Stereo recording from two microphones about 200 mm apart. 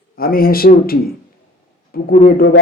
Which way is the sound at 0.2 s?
50° left (ahead or behind).